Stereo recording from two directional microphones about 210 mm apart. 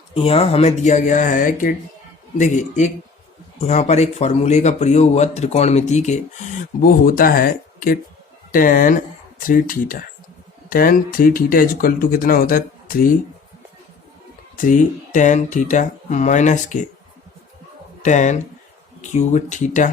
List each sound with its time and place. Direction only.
0.1 s speech: 25° left (ahead or behind); by 13.1 s 40° left (ahead or behind)
14.6 s speech: 40° left (ahead or behind)
18.0 s speech: 35° left (ahead or behind)